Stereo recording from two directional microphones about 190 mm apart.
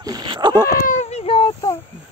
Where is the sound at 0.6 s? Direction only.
45° left (ahead or behind); by 1.7 s 25° left (ahead or behind).